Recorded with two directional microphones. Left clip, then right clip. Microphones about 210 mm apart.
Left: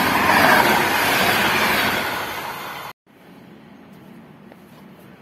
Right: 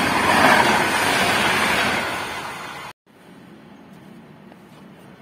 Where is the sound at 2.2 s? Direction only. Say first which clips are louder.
Left 1 dB; 35° left (ahead or behind).